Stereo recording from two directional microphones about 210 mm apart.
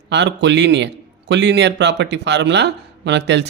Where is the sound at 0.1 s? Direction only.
55° right (ahead or behind).